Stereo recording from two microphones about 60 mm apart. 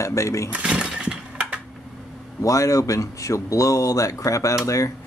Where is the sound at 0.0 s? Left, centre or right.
Left.